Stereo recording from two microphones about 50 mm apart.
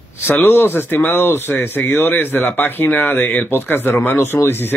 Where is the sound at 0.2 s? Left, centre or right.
Left.